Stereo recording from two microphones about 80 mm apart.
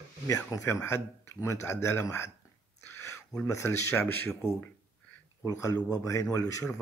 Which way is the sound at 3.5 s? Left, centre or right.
Left.